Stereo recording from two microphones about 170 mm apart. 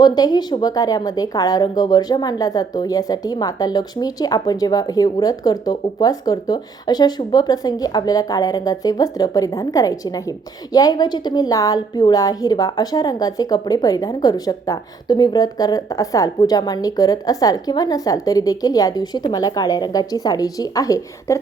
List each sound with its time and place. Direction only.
0.0 s a woman's voice: 25° left (ahead or behind)